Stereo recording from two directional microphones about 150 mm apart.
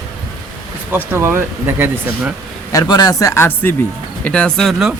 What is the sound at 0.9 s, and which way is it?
Speech, 15° right (ahead or behind).